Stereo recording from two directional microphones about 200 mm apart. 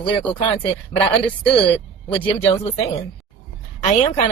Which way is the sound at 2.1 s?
25° left (ahead or behind).